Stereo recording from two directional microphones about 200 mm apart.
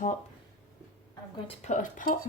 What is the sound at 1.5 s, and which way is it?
Speech, 35° left (ahead or behind).